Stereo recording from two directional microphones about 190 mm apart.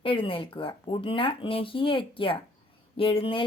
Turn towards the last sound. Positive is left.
turn(degrees=30)  # may be behind; listen again after turning